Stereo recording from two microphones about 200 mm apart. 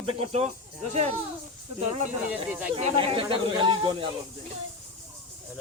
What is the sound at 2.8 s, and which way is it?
Speech, 30° right (ahead or behind).